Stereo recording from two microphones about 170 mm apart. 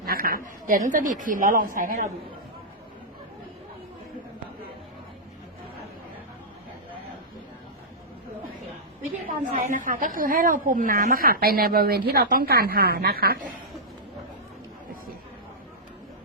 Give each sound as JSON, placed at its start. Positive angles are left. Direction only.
{"t": 0.0, "sound": "a sound", "side_deg": -60}
{"t": 0.9, "sound": "speech", "side_deg": -50}
{"t": 9.2, "sound": "a woman's voice", "side_deg": -50}